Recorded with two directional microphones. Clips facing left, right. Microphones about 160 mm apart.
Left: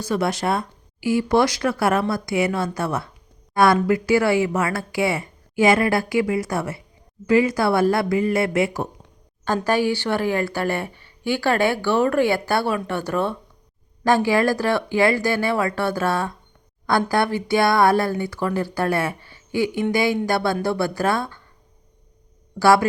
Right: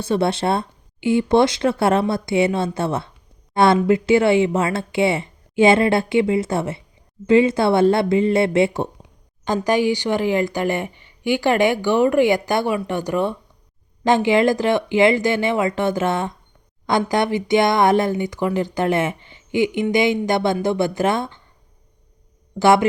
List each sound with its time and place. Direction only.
0.0 s speech: 25° right (ahead or behind)
9.6 s speech: 15° right (ahead or behind)
22.5 s speech: 20° right (ahead or behind)